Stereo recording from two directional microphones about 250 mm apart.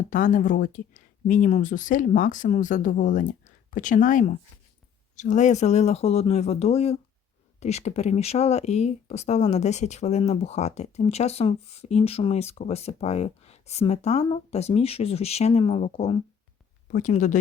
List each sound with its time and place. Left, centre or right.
0.1 s speech: left